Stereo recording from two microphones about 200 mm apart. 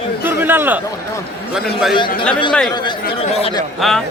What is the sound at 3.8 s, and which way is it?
Speech, centre (ahead or behind).